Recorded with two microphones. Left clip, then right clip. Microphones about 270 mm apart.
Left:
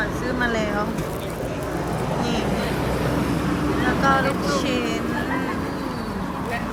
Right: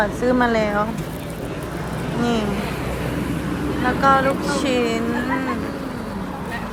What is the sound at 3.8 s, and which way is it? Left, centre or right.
Speech, centre.